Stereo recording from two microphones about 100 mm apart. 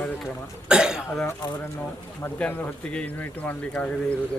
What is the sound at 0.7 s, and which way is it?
Speech, 10° right (ahead or behind).